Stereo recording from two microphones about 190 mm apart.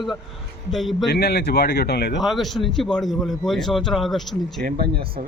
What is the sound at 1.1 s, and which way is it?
A man's voice, 55° left (ahead or behind).